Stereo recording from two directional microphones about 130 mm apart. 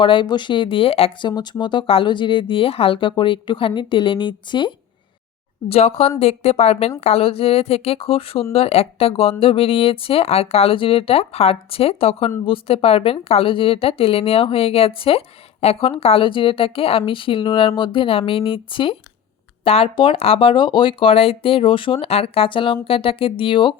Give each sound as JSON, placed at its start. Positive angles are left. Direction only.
{"t": 0.0, "sound": "speech", "side_deg": 40}
{"t": 1.3, "sound": "speech", "side_deg": 35}
{"t": 5.6, "sound": "speech", "side_deg": 50}